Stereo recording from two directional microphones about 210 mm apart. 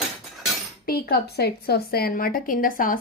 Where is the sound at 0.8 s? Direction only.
45° left (ahead or behind).